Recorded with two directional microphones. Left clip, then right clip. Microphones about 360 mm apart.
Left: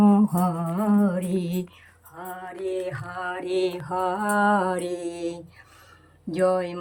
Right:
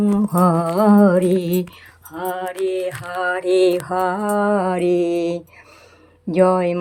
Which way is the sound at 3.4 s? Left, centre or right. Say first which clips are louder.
Right 10 dB; centre.